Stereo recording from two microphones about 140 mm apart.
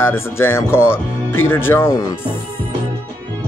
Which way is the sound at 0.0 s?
15° left (ahead or behind).